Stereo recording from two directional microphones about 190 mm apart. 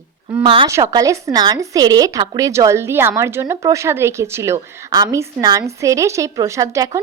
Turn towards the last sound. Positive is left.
turn(degrees=-15)  # may be behind; listen again after turning